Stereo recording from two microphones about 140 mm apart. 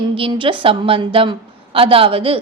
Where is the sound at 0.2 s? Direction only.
40° right (ahead or behind).